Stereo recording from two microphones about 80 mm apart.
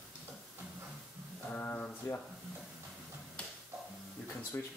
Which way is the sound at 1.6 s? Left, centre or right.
Left.